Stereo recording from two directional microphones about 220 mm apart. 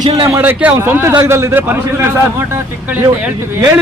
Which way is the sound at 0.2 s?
10° right (ahead or behind).